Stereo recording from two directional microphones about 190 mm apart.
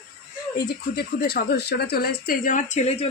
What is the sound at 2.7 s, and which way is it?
Speech, 35° left (ahead or behind).